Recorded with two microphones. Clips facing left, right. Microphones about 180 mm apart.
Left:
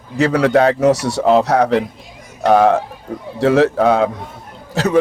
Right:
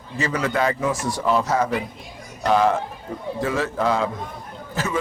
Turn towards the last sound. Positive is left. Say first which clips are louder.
# left 10 dB
turn(degrees=70)  # may be behind; listen again after turning